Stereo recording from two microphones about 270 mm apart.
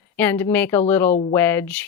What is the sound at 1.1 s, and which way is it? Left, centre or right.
Speech, left.